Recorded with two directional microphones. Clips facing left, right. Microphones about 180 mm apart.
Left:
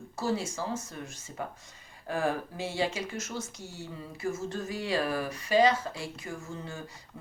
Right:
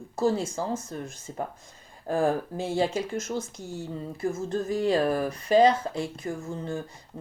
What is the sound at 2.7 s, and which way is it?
Speech, 45° right (ahead or behind).